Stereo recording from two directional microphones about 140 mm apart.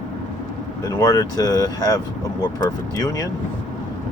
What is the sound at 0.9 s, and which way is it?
Speech, 25° left (ahead or behind).